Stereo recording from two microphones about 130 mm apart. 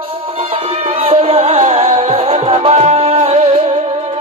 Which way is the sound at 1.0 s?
50° right (ahead or behind).